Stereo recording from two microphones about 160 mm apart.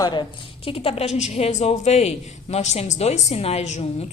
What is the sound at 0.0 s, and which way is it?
A woman's voice, 30° left (ahead or behind).